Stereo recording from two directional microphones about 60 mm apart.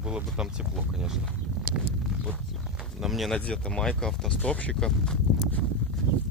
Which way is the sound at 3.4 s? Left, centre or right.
Centre.